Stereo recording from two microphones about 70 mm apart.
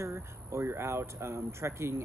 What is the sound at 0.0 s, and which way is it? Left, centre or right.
Speech, right.